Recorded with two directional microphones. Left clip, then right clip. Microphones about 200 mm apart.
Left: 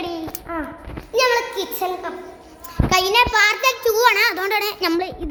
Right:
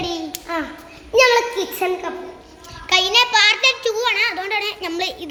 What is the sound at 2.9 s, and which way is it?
Child singing, 10° left (ahead or behind).